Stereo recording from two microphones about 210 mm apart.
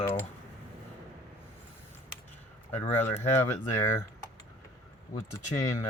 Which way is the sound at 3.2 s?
10° left (ahead or behind).